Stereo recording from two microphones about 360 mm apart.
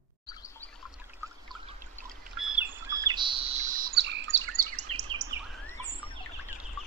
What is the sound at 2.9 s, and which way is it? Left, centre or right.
Chirp, centre.